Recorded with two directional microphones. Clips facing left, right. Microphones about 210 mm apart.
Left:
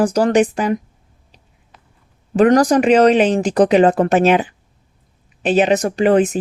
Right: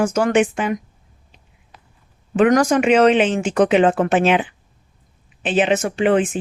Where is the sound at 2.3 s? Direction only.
35° left (ahead or behind).